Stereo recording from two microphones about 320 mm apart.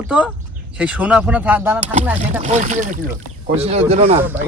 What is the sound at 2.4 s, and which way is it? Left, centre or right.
Speech, right.